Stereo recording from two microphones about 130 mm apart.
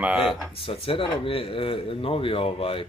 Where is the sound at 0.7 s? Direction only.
45° left (ahead or behind).